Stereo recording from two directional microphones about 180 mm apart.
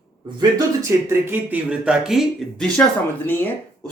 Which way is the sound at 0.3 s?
20° right (ahead or behind).